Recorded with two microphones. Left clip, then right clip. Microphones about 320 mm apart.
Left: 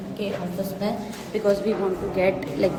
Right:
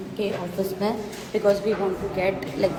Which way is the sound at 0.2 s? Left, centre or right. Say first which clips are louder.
Right 3 dB; centre.